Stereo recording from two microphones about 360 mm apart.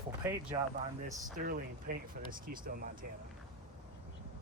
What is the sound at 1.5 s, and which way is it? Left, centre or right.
Speech, right.